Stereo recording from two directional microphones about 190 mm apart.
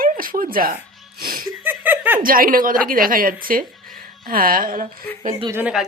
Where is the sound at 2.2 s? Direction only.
50° right (ahead or behind).